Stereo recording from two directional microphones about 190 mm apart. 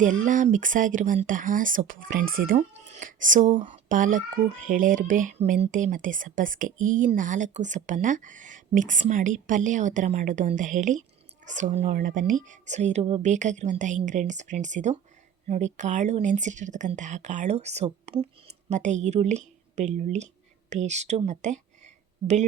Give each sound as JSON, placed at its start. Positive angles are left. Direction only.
{"t": 0.0, "sound": "speech", "side_deg": -40}
{"t": 2.6, "sound": "speech", "side_deg": -35}